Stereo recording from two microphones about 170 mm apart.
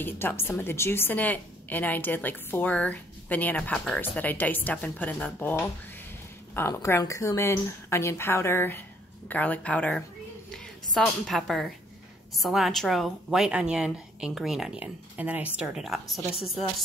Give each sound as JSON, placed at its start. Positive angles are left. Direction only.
{"t": 0.0, "sound": "a woman's voice", "side_deg": 10}